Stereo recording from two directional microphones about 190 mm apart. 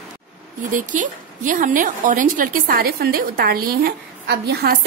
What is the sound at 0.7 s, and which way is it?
A woman's voice, 45° right (ahead or behind).